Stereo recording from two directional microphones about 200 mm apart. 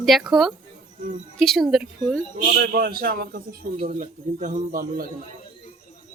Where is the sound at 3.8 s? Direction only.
40° right (ahead or behind).